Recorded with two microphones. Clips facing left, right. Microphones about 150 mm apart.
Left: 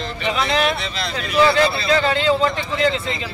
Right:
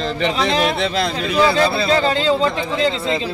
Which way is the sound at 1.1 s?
30° right (ahead or behind).